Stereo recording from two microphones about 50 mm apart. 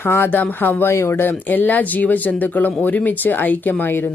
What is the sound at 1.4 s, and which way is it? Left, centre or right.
Speech, left.